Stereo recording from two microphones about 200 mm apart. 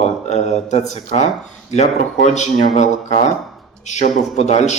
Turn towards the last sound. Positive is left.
turn(degrees=35)  # may be behind; listen again after turning